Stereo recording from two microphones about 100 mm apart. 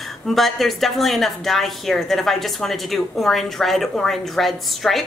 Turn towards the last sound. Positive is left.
turn(degrees=0)  # may be behind; listen again after turning